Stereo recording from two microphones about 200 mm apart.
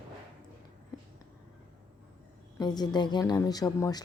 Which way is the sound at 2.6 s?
20° left (ahead or behind).